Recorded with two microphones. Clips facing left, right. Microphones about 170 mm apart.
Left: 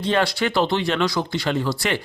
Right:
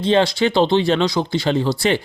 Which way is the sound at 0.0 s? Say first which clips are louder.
Right 5 dB; 25° right (ahead or behind).